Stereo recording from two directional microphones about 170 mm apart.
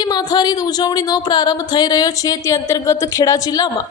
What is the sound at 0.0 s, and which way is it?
A woman's voice, 25° left (ahead or behind).